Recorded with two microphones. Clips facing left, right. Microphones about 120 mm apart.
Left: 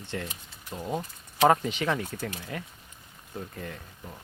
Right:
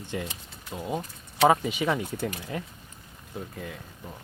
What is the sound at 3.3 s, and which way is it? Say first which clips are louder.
Speech: right 1 dB; 5° right (ahead or behind).